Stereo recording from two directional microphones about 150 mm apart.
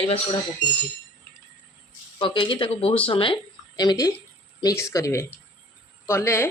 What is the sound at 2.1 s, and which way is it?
Speech, 30° left (ahead or behind).